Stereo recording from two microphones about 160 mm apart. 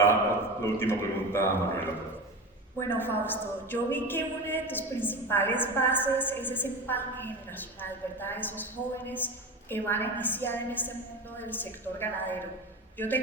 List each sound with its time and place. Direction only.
0.6 s a woman's voice: 15° left (ahead or behind)